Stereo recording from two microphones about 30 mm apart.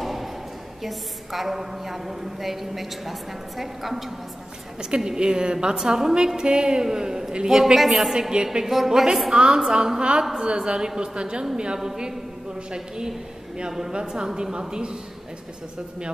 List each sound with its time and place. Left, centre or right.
0.0 s a sound: centre
0.8 s a woman's voice: centre
5.0 s a woman's voice: right
5.8 s a woman's voice: centre
6.1 s a woman's voice: right
7.8 s a woman's voice: centre
8.1 s a woman's voice: right
8.6 s a woman's voice: centre
9.3 s a woman's voice: centre